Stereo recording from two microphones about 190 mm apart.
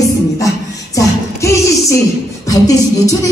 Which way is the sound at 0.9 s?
15° left (ahead or behind).